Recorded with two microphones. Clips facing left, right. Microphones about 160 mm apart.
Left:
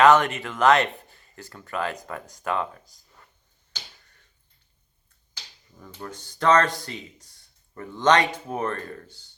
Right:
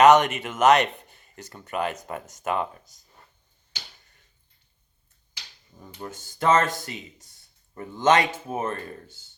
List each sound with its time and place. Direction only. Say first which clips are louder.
0.0 s speech: right 1 dB; 20° right (ahead or behind)
1.0 s a sound: even; 20° right (ahead or behind)
1.6 s speech: right 1 dB; 20° right (ahead or behind)
5.8 s speech: even; 25° right (ahead or behind)